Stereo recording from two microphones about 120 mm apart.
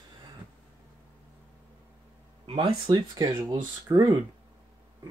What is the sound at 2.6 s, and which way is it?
Speech, 35° right (ahead or behind).